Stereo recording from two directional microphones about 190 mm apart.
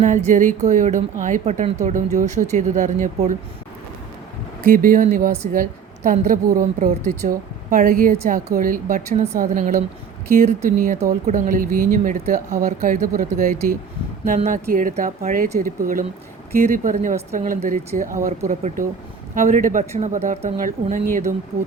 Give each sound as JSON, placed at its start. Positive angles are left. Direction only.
{"t": 0.0, "sound": "a woman's voice", "side_deg": -40}
{"t": 4.6, "sound": "a woman's voice", "side_deg": -45}
{"t": 14.3, "sound": "a woman's voice", "side_deg": -35}
{"t": 14.7, "sound": "a woman's voice", "side_deg": -45}